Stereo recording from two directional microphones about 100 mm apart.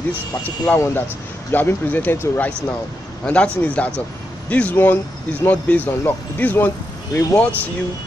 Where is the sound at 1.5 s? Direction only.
20° left (ahead or behind).